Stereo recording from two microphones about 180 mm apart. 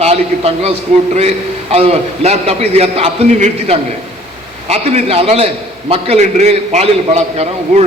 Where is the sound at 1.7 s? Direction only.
35° right (ahead or behind).